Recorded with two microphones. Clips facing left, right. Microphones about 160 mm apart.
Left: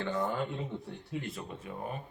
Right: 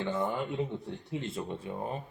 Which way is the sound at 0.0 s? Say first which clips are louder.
Right 1 dB; 25° right (ahead or behind).